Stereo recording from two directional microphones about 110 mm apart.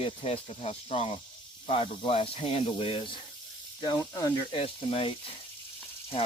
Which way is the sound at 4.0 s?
30° left (ahead or behind).